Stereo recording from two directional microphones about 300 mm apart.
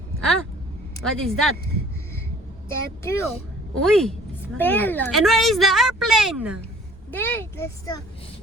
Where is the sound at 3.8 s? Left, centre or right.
Centre.